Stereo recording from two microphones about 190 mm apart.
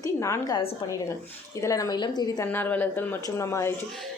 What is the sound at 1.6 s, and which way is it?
Speech, 15° left (ahead or behind).